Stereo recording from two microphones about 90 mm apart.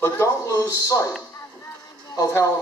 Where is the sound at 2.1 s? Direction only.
35° left (ahead or behind).